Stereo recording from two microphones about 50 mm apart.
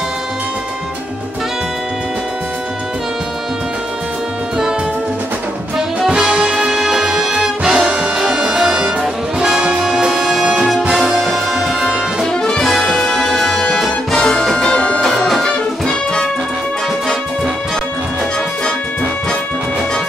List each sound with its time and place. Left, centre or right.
5.8 s music: centre
9.0 s music: centre
11.5 s music: centre
12.3 s music: centre